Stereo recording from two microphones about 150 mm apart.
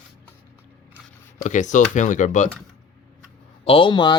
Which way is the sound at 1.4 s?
55° left (ahead or behind).